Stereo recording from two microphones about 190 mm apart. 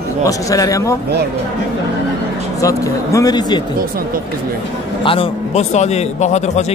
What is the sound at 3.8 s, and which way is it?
Speech, 50° right (ahead or behind).